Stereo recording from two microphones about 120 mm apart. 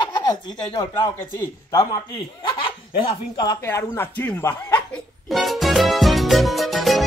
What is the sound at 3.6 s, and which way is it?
Speech, 25° left (ahead or behind).